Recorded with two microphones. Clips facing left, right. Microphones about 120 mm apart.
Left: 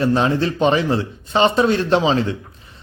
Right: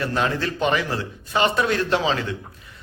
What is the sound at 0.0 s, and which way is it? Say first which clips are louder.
A man's voice: left 6 dB; 25° left (ahead or behind).